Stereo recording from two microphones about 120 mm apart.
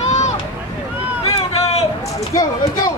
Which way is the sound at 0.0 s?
70° left (ahead or behind).